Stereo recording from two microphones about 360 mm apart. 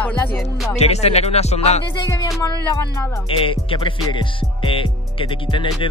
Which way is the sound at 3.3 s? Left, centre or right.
Centre.